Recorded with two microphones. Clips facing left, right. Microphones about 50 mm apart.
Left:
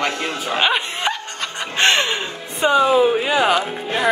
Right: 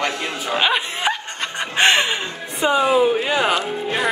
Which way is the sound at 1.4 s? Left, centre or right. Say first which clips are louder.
Right 2 dB; centre.